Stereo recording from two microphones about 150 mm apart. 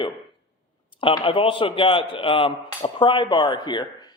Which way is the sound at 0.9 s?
35° left (ahead or behind).